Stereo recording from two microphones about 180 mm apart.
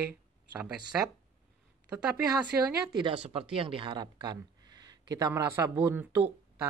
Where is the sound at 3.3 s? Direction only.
30° right (ahead or behind); by 6.0 s 15° right (ahead or behind).